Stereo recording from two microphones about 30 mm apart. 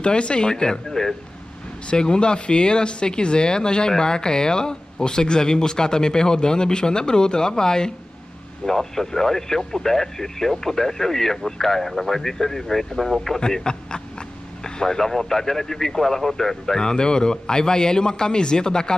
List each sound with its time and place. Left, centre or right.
0.0 s speech: left
0.5 s speech: left
0.8 s a sound: centre
1.9 s speech: left; by 13.1 s centre
13.3 s speech: centre
14.6 s speech: left
16.8 s speech: left